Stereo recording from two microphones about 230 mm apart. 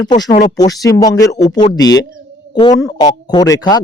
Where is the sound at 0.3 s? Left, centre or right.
Left.